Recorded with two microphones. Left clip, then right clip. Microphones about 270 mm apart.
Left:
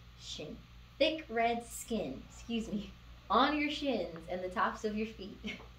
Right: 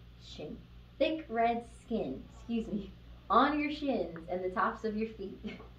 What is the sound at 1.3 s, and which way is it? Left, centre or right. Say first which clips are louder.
Speech: right 2 dB; left.